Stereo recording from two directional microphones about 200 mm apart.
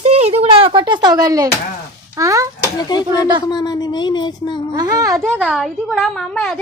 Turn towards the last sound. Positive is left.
turn(degrees=0)  # may be behind; listen again after turning